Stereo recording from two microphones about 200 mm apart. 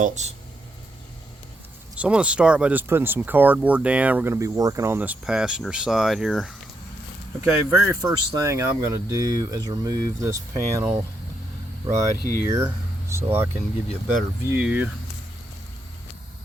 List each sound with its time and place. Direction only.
0.0 s speech: 35° right (ahead or behind)
2.0 s speech: 5° right (ahead or behind)
7.4 s speech: 15° right (ahead or behind)
12.5 s speech: 15° right (ahead or behind)